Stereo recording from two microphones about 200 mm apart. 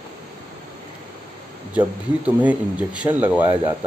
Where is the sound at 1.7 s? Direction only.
5° right (ahead or behind).